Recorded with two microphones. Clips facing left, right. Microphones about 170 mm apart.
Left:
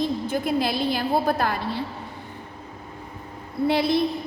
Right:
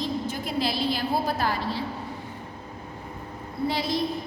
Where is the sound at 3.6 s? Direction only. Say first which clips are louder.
Left 6 dB; 60° left (ahead or behind).